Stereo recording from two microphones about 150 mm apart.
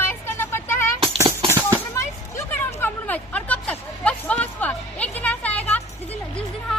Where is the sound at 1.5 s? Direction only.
20° right (ahead or behind).